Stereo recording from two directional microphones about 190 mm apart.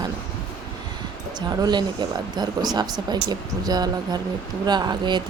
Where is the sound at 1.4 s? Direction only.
25° right (ahead or behind).